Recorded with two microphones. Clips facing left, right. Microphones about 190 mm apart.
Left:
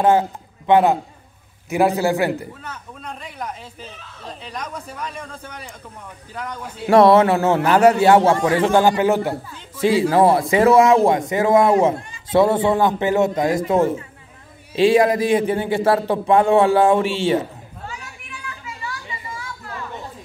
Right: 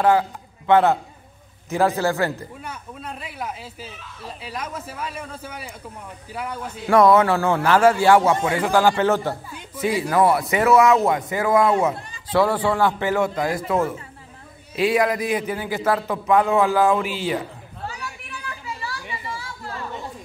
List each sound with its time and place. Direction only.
0.0 s a man's voice: 25° left (ahead or behind)
2.6 s speech: 10° right (ahead or behind)
6.9 s a man's voice: 30° left (ahead or behind)
9.8 s a man's voice: 25° left (ahead or behind)
18.8 s chatter: 35° right (ahead or behind)